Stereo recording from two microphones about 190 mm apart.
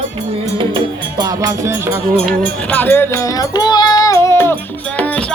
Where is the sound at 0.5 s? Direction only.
25° right (ahead or behind).